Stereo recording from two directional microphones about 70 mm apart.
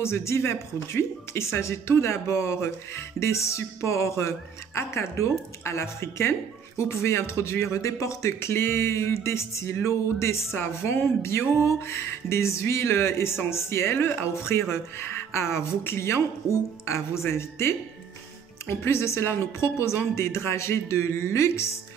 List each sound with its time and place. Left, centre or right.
0.0 s speech: left